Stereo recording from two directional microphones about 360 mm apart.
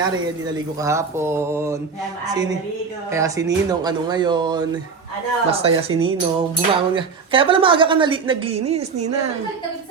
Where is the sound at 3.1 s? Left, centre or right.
Centre.